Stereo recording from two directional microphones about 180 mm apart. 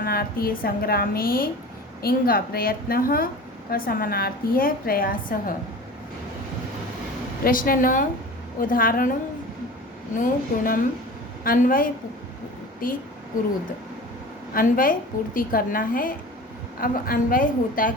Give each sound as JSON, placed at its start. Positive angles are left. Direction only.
{"t": 0.0, "sound": "a woman's voice", "side_deg": 55}
{"t": 7.4, "sound": "a woman's voice", "side_deg": 50}
{"t": 10.2, "sound": "a woman's voice", "side_deg": 50}
{"t": 14.5, "sound": "a woman's voice", "side_deg": 50}